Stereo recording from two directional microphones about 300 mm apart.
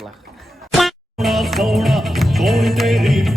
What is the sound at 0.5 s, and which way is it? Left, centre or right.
Music, centre.